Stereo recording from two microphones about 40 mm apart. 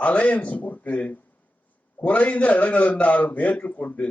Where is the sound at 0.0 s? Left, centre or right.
Left.